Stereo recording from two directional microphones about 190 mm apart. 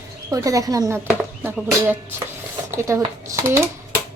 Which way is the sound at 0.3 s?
20° right (ahead or behind).